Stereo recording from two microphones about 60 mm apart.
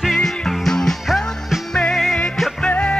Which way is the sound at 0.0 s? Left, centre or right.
Centre.